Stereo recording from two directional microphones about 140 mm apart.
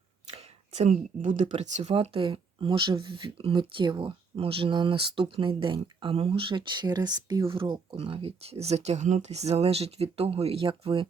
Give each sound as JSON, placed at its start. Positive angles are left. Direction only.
{"t": 0.3, "sound": "speech", "side_deg": -50}